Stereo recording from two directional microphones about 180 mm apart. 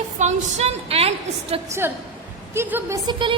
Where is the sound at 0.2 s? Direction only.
40° right (ahead or behind).